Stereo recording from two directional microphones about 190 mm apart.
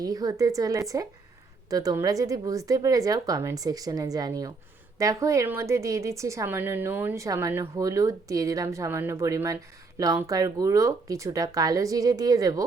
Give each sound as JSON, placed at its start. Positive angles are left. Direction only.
{"t": 0.0, "sound": "a woman's voice", "side_deg": -20}